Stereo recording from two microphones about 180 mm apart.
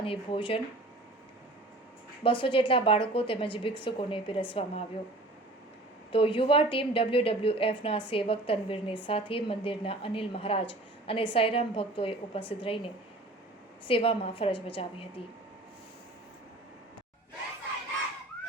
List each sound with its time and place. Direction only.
0.0 s a woman's voice: 30° left (ahead or behind)
2.2 s a woman's voice: 30° left (ahead or behind)
6.1 s a woman's voice: 30° left (ahead or behind)